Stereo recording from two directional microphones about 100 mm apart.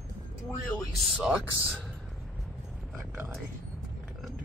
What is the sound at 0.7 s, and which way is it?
Speech, 5° left (ahead or behind).